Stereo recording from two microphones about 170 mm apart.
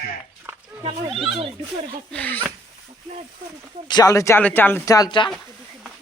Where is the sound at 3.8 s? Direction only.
25° left (ahead or behind).